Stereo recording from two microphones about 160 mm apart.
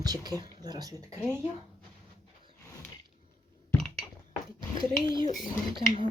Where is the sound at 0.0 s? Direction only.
25° right (ahead or behind).